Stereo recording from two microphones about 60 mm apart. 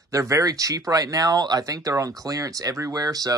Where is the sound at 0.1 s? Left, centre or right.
Right.